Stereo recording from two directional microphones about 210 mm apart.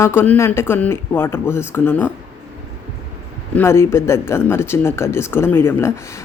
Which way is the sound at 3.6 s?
10° left (ahead or behind).